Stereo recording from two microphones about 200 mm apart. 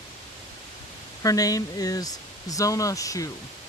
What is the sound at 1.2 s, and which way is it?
Speech, 15° left (ahead or behind).